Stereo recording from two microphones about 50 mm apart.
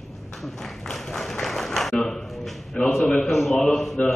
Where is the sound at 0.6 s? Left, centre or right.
Centre.